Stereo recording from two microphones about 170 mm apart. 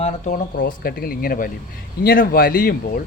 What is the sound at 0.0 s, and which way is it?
Speech, 50° left (ahead or behind).